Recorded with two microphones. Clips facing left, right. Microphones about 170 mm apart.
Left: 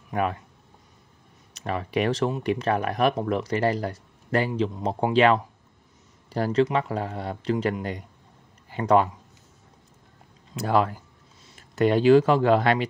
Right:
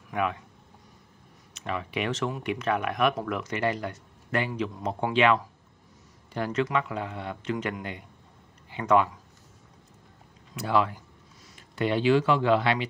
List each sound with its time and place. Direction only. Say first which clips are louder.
0.1 s speech: left 3 dB; 40° left (ahead or behind)
1.5 s speech: left 5 dB; 40° left (ahead or behind)
10.6 s speech: left 3 dB; 45° left (ahead or behind)